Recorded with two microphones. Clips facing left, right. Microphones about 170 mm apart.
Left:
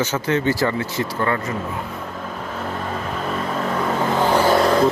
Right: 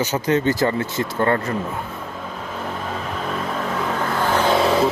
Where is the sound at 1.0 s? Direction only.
30° right (ahead or behind).